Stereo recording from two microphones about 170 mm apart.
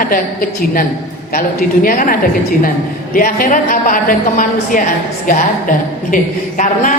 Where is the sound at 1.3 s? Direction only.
55° left (ahead or behind).